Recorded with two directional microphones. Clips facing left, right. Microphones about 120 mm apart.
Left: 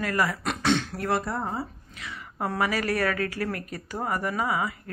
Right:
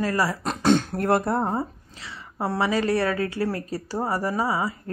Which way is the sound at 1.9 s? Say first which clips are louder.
Right 2 dB; 30° right (ahead or behind).